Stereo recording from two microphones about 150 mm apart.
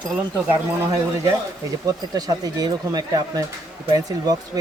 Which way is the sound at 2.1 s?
25° right (ahead or behind).